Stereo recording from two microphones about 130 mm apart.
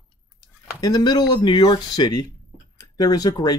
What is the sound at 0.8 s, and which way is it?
Speech, 30° left (ahead or behind).